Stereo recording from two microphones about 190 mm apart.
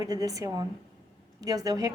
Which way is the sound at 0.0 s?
20° right (ahead or behind).